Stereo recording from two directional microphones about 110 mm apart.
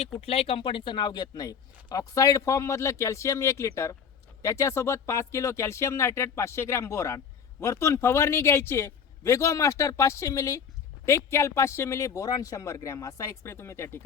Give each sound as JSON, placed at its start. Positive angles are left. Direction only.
{"t": 0.2, "sound": "a man's voice", "side_deg": 60}